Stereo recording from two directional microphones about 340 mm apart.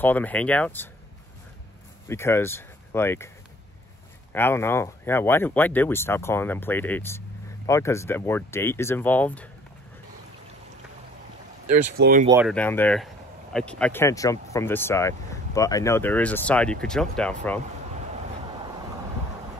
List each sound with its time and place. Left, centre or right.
0.0 s speech: centre
2.0 s speech: centre
4.3 s speech: centre
12.0 s speech: right
12.3 s speech: centre